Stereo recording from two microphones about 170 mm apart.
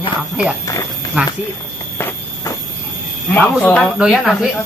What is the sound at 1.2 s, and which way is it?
Speech, 10° right (ahead or behind).